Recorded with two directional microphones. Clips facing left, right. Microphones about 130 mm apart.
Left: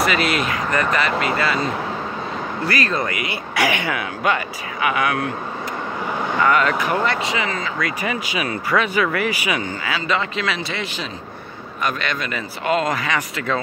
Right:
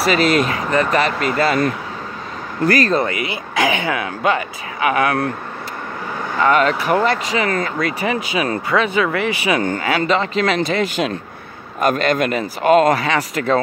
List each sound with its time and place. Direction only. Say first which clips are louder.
0.0 s speech: right 4 dB; 35° right (ahead or behind)
2.6 s speech: right 7 dB; 40° right (ahead or behind)
3.0 s speech: right 4 dB; 30° right (ahead or behind)
6.4 s speech: right 3 dB; 30° right (ahead or behind)
9.6 s speech: right 7 dB; 50° right (ahead or behind)
10.0 s speech: right 4 dB; 35° right (ahead or behind)
12.9 s speech: right 5 dB; 35° right (ahead or behind)